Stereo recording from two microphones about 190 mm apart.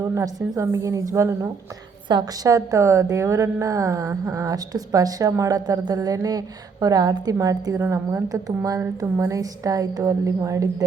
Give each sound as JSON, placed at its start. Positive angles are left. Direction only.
{"t": 0.0, "sound": "a woman's voice", "side_deg": -15}